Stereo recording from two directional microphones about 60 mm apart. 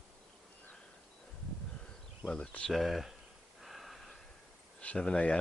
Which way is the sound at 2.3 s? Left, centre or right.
Centre.